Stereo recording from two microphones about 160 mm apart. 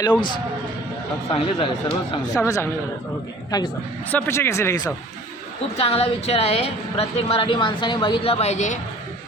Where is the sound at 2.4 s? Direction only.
20° left (ahead or behind).